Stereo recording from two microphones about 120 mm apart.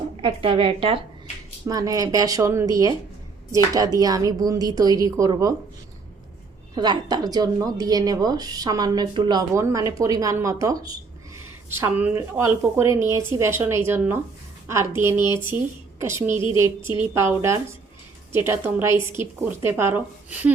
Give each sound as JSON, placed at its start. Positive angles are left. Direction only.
{"t": 0.2, "sound": "a woman's voice", "side_deg": -45}
{"t": 1.6, "sound": "speech", "side_deg": -30}
{"t": 6.7, "sound": "speech", "side_deg": -35}
{"t": 9.6, "sound": "speech", "side_deg": -25}
{"t": 11.9, "sound": "speech", "side_deg": -10}